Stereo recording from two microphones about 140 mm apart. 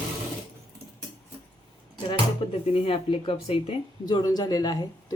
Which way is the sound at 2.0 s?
40° left (ahead or behind).